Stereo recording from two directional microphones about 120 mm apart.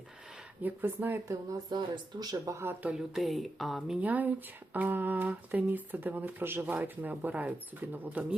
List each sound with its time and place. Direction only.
0.6 s speech: 15° right (ahead or behind)
1.3 s speech: 35° right (ahead or behind); by 2.9 s 20° right (ahead or behind)
2.9 s speech: 5° right (ahead or behind)